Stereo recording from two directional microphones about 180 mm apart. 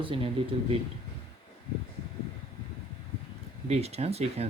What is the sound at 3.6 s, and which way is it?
Speech, 35° right (ahead or behind).